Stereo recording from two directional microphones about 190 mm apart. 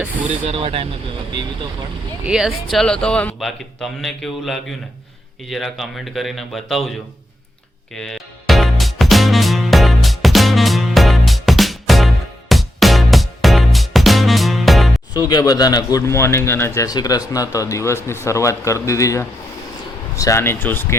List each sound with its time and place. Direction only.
0.4 s speech: 30° right (ahead or behind)
2.2 s a man's voice: 5° right (ahead or behind)
7.9 s music: centre (ahead or behind)
15.1 s speech: 20° left (ahead or behind)